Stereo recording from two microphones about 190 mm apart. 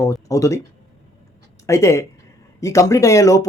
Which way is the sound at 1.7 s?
15° left (ahead or behind).